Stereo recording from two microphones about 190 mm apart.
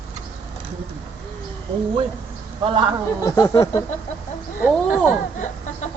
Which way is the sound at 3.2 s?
15° left (ahead or behind).